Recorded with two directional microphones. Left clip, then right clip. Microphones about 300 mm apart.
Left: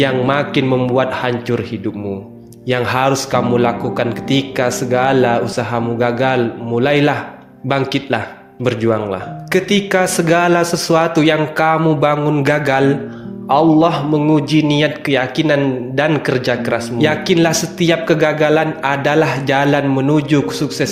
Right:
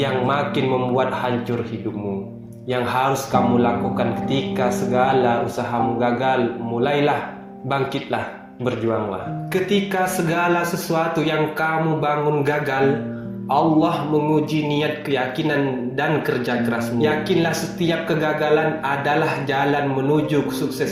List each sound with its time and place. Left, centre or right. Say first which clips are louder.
0.0 s a man's voice: left 5 dB; left
2.6 s a man's voice: left 5 dB; left
9.5 s a man's voice: left 7 dB; left